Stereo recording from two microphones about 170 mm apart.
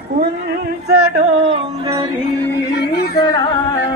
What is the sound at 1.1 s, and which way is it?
Music, 40° right (ahead or behind).